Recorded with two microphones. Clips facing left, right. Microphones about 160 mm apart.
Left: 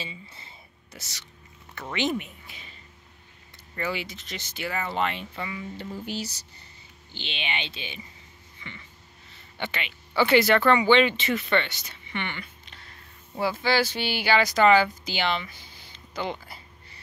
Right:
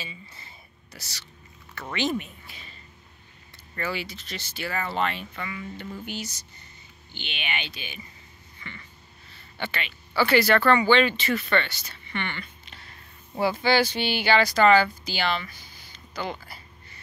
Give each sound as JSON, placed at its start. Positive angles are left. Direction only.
{"t": 0.0, "sound": "speech", "side_deg": 25}
{"t": 3.7, "sound": "speech", "side_deg": 20}
{"t": 8.5, "sound": "a sound", "side_deg": 15}
{"t": 9.3, "sound": "speech", "side_deg": 20}
{"t": 13.4, "sound": "speech", "side_deg": 0}